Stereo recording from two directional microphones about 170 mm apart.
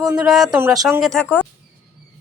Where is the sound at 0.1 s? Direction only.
5° right (ahead or behind).